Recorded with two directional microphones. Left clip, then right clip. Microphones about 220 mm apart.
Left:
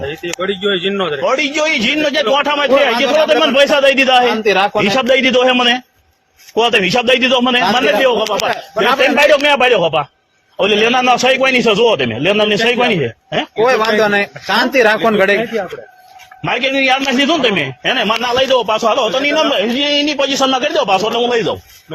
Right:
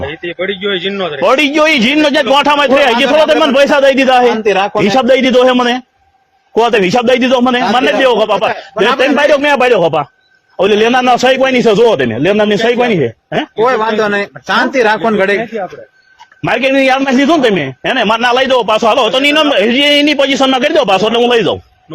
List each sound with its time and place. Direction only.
0.1 s speech: 10° right (ahead or behind)
1.2 s a man's voice: 50° right (ahead or behind)
4.4 s a man's voice: 30° right (ahead or behind)
4.8 s a man's voice: 50° right (ahead or behind)
13.6 s a man's voice: 30° right (ahead or behind)
16.4 s a man's voice: 45° right (ahead or behind)